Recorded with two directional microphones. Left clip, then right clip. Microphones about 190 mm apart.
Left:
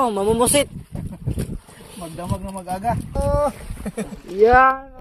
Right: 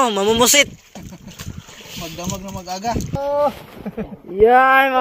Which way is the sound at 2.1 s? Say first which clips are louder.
Left 2 dB; 5° left (ahead or behind).